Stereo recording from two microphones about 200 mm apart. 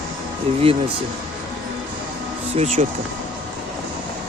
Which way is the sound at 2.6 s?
35° right (ahead or behind).